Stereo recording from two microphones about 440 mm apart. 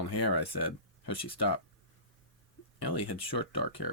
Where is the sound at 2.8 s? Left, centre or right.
Left.